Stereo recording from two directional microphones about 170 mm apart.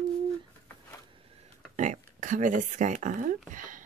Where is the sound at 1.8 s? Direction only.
50° right (ahead or behind).